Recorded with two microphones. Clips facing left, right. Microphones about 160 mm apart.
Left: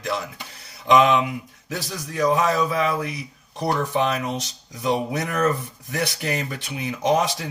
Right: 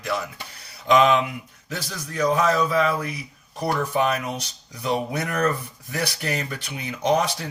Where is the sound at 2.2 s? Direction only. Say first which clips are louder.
Even; 15° left (ahead or behind).